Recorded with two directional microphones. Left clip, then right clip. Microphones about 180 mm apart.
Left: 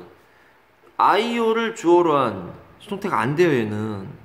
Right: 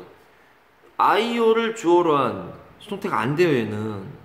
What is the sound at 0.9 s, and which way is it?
Speech, 25° left (ahead or behind).